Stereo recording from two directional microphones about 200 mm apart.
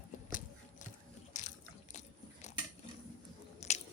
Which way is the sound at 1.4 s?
35° left (ahead or behind).